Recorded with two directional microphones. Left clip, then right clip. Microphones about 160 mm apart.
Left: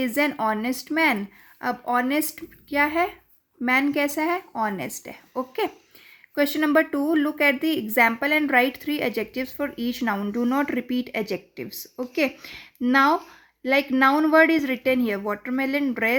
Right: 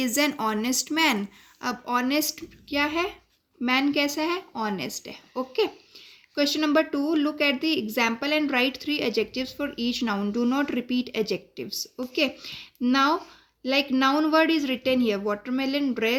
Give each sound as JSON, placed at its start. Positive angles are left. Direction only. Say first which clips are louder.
{"t": 0.0, "sound": "a woman's voice", "louder": "left 2 dB", "side_deg": 40}